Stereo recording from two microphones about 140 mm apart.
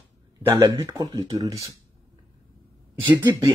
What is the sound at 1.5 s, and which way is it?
Speech, 20° right (ahead or behind).